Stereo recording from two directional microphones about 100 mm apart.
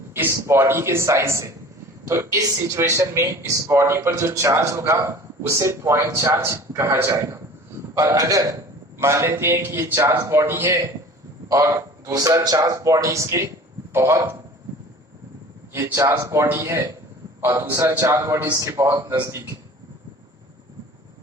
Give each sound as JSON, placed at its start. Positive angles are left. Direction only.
{"t": 0.1, "sound": "a man's voice", "side_deg": -25}
{"t": 15.7, "sound": "speech", "side_deg": -25}
{"t": 18.5, "sound": "a man's voice", "side_deg": -35}